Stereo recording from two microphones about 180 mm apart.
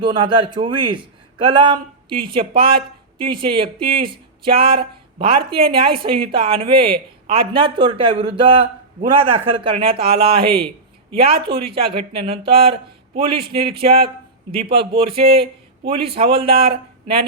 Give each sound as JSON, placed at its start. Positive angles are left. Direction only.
{"t": 0.0, "sound": "speech", "side_deg": -25}